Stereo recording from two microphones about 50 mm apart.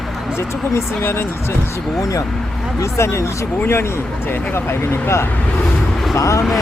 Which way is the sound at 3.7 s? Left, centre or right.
Left.